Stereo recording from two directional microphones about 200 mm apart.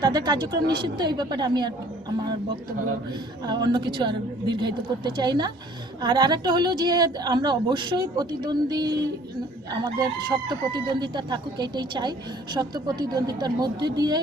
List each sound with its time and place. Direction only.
0.0 s a woman's voice: 20° right (ahead or behind)
3.4 s a woman's voice: 20° right (ahead or behind)